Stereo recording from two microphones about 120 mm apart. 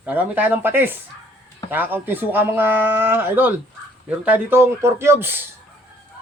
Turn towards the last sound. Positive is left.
turn(degrees=-20)  # may be behind; listen again after turning